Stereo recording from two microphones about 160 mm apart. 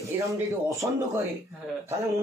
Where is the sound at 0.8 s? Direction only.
15° right (ahead or behind).